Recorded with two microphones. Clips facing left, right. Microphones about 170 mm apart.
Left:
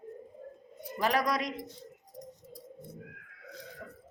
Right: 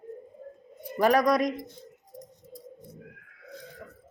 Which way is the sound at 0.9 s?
50° right (ahead or behind).